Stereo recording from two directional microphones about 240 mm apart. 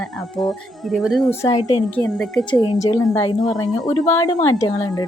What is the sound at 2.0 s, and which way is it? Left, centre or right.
Speech, centre.